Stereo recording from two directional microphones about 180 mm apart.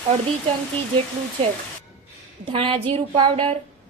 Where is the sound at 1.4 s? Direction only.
30° right (ahead or behind).